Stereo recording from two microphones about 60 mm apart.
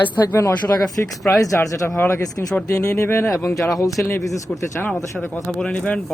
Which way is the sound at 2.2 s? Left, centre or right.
Left.